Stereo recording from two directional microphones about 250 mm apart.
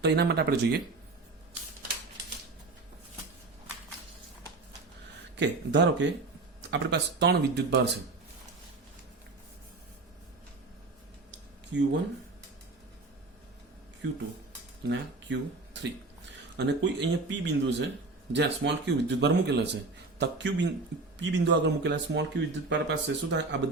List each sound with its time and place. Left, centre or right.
0.0 s speech: right
5.4 s a man's voice: right
14.8 s a man's voice: right